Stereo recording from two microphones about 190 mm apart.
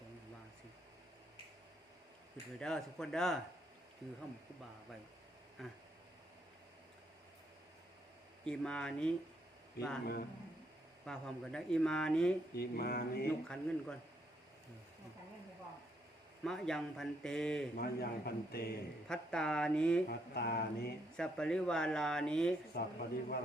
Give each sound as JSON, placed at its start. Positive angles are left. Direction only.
{"t": 2.6, "sound": "speech", "side_deg": 5}
{"t": 5.6, "sound": "speech", "side_deg": 0}
{"t": 8.4, "sound": "speech", "side_deg": 5}
{"t": 11.0, "sound": "speech", "side_deg": 5}
{"t": 12.5, "sound": "a man's voice", "side_deg": 55}
{"t": 13.2, "sound": "speech", "side_deg": 5}
{"t": 16.4, "sound": "speech", "side_deg": 0}
{"t": 17.7, "sound": "a man's voice", "side_deg": 55}
{"t": 19.0, "sound": "speech", "side_deg": 5}
{"t": 20.1, "sound": "a man's voice", "side_deg": 55}
{"t": 21.2, "sound": "speech", "side_deg": 5}
{"t": 22.7, "sound": "a man's voice", "side_deg": 55}